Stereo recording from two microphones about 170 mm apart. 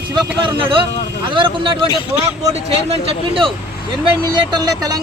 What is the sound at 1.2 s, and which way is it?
Speech, 30° right (ahead or behind).